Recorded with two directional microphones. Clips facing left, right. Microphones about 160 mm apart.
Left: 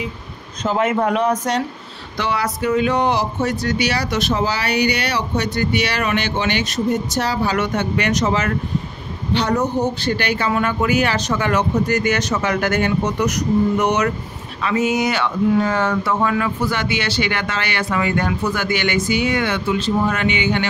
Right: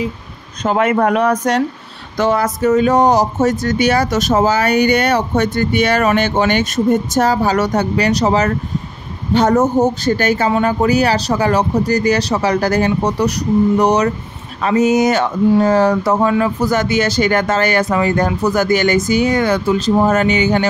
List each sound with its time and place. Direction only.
0.7 s speech: 65° right (ahead or behind)
2.1 s speech: 45° right (ahead or behind)
9.3 s speech: 45° right (ahead or behind)